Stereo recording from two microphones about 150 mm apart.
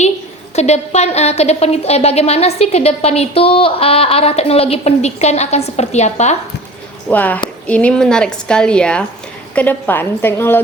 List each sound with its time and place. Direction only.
0.5 s a woman's voice: 45° left (ahead or behind)
7.1 s a woman's voice: 10° left (ahead or behind)